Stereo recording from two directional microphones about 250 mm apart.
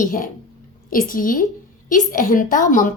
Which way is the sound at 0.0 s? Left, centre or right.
Left.